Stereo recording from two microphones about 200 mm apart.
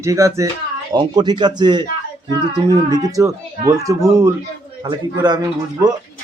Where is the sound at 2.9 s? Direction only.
15° right (ahead or behind).